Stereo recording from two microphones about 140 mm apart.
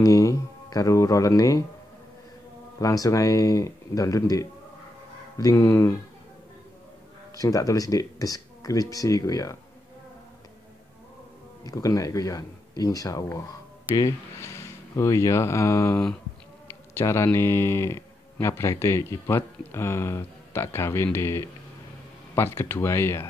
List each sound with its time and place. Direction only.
0.0 s speech: 25° left (ahead or behind)
2.8 s speech: 25° left (ahead or behind)
7.3 s speech: 25° left (ahead or behind)
11.6 s speech: 25° left (ahead or behind)